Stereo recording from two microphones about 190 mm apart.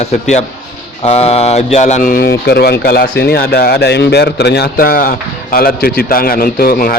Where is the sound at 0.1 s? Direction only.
35° left (ahead or behind).